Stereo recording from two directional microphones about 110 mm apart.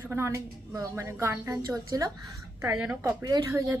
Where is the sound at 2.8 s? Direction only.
10° right (ahead or behind).